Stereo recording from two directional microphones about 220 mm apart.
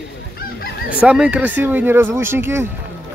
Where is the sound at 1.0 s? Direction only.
5° right (ahead or behind).